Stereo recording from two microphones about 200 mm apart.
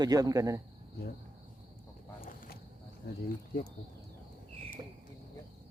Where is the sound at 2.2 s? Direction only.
45° left (ahead or behind).